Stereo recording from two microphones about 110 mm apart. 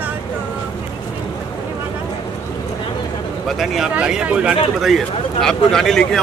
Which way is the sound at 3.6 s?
5° right (ahead or behind).